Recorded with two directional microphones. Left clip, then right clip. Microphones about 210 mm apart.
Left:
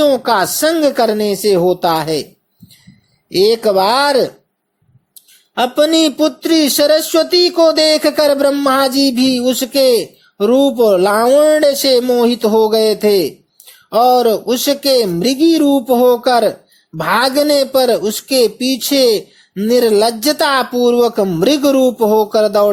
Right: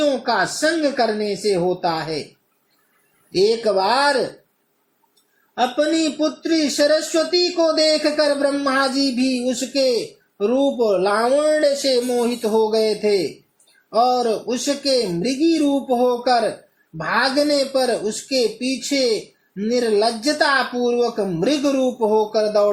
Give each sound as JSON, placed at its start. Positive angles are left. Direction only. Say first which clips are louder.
{"t": 0.0, "sound": "speech", "louder": "left 7 dB", "side_deg": 25}
{"t": 3.3, "sound": "speech", "louder": "left 6 dB", "side_deg": 25}
{"t": 5.5, "sound": "speech", "louder": "left 7 dB", "side_deg": 30}